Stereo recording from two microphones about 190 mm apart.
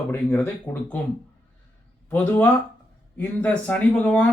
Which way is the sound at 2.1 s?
10° left (ahead or behind).